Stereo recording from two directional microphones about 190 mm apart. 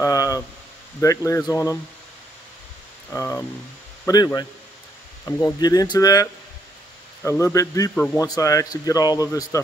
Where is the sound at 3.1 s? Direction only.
15° left (ahead or behind).